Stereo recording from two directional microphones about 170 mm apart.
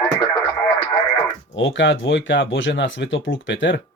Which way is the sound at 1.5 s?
90° left.